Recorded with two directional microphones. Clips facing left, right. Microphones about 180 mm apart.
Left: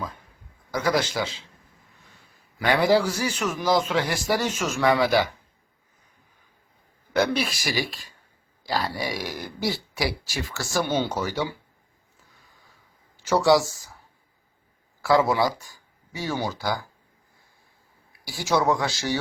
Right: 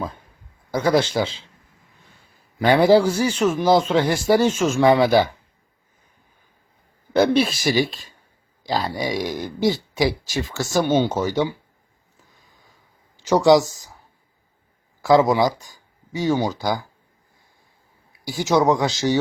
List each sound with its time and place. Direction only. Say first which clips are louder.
0.7 s speech: right 5 dB; 30° right (ahead or behind)
2.6 s speech: right 6 dB; 30° right (ahead or behind)
7.1 s speech: right 6 dB; 25° right (ahead or behind)
13.2 s speech: right 5 dB; 20° right (ahead or behind)
15.0 s speech: right 5 dB; 20° right (ahead or behind)
18.3 s speech: right 5 dB; 20° right (ahead or behind)